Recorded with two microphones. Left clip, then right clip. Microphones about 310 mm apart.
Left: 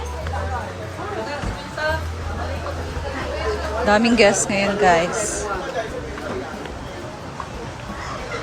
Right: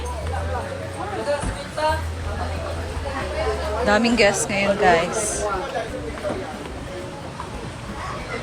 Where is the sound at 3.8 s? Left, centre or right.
Centre.